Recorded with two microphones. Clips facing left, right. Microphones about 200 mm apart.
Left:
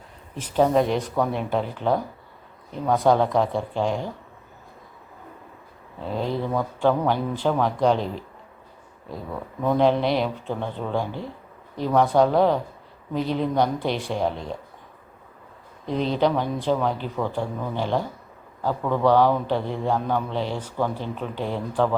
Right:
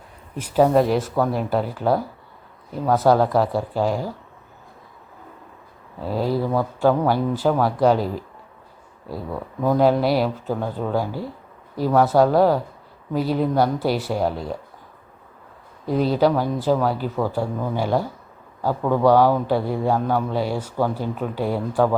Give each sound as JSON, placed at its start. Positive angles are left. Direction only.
{"t": 0.3, "sound": "speech", "side_deg": -10}
{"t": 6.0, "sound": "a man's voice", "side_deg": -5}
{"t": 9.6, "sound": "a man's voice", "side_deg": -5}
{"t": 15.9, "sound": "a man's voice", "side_deg": -5}